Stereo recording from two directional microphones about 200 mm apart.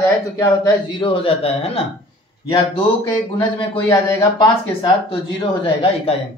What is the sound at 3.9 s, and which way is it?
Speech, 20° left (ahead or behind).